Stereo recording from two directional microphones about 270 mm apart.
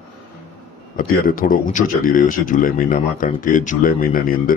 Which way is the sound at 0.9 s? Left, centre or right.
Left.